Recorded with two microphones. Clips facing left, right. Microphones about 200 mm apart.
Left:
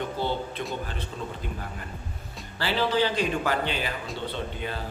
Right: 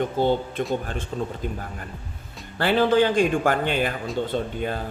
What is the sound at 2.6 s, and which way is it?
Speech, 50° right (ahead or behind).